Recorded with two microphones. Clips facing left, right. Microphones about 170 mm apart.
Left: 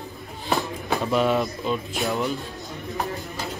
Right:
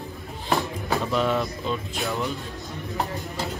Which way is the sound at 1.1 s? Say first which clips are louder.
Left 4 dB; 15° left (ahead or behind).